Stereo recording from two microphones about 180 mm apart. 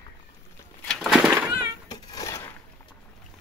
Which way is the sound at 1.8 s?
20° left (ahead or behind).